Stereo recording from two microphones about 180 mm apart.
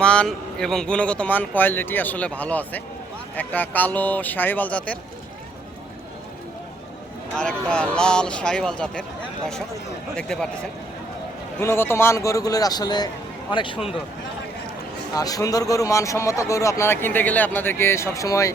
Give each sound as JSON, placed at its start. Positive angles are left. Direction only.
{"t": 0.0, "sound": "speech", "side_deg": 5}
{"t": 7.3, "sound": "speech", "side_deg": 5}
{"t": 10.2, "sound": "speech", "side_deg": 5}
{"t": 11.6, "sound": "a man's voice", "side_deg": 15}
{"t": 15.1, "sound": "speech", "side_deg": 20}